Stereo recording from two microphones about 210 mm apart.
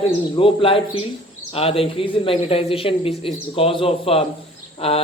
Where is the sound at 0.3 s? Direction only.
25° left (ahead or behind).